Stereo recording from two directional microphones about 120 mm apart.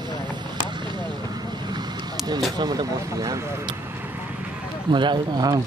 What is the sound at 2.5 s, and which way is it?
Speech, 35° right (ahead or behind).